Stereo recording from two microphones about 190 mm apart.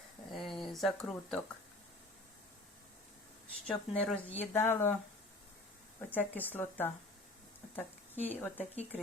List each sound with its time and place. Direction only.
0.3 s a sound: centre (ahead or behind)
3.7 s speech: 5° left (ahead or behind)
6.0 s speech: 10° left (ahead or behind)